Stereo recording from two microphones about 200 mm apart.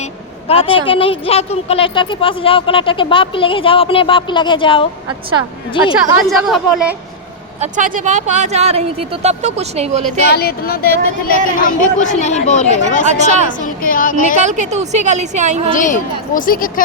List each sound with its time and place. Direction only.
0.0 s a woman's voice: 30° left (ahead or behind)
6.2 s speech: centre (ahead or behind)
7.6 s speech: 40° right (ahead or behind)
10.2 s speech: 50° left (ahead or behind)
13.1 s speech: 35° right (ahead or behind)
13.8 s speech: 45° left (ahead or behind)
14.3 s speech: 35° right (ahead or behind)
15.7 s speech: 40° left (ahead or behind)